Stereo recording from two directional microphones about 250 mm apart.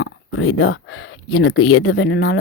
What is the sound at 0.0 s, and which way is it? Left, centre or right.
Speech, left.